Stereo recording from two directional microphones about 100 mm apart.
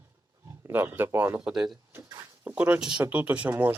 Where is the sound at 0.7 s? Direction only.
20° right (ahead or behind).